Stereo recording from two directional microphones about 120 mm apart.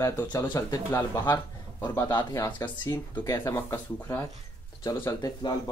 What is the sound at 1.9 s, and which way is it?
Speech, 35° left (ahead or behind).